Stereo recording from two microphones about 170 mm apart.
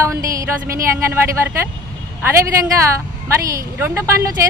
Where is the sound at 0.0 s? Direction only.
15° right (ahead or behind).